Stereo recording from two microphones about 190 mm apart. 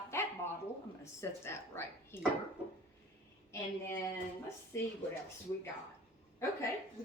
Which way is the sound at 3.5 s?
15° left (ahead or behind).